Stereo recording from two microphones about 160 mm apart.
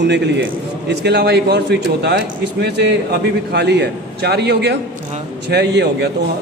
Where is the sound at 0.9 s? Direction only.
90° right.